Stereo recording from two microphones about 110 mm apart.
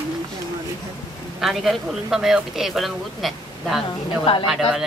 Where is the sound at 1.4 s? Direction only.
Centre (ahead or behind).